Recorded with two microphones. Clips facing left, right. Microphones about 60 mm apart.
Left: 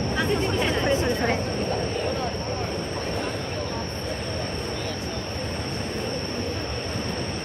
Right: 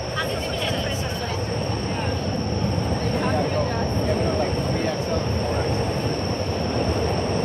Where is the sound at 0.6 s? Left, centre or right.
Left.